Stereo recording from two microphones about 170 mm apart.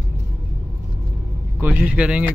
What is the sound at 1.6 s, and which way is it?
Speech, 10° right (ahead or behind).